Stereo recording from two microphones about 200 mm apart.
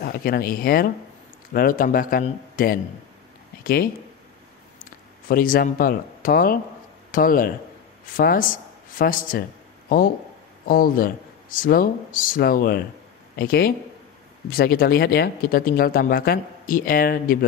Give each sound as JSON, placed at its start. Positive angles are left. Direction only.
{"t": 0.0, "sound": "speech", "side_deg": 50}
{"t": 5.3, "sound": "speech", "side_deg": 45}